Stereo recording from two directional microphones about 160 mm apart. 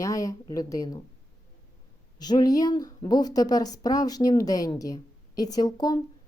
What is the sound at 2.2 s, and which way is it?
Speech, 25° left (ahead or behind).